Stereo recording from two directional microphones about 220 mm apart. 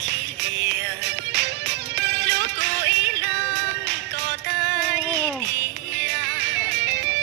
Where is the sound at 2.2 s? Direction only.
50° right (ahead or behind).